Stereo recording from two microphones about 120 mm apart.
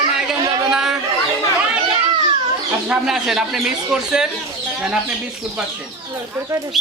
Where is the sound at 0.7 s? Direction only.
5° right (ahead or behind).